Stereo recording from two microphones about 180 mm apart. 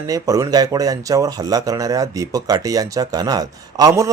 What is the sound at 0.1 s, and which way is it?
Speech, 20° right (ahead or behind).